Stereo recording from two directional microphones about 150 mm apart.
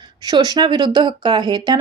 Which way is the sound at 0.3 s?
25° right (ahead or behind).